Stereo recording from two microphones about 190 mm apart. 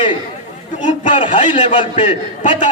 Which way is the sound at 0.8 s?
40° left (ahead or behind).